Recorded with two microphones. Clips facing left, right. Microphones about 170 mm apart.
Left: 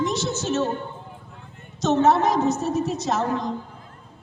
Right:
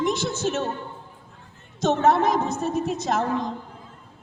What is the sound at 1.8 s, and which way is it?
Speech, 55° right (ahead or behind).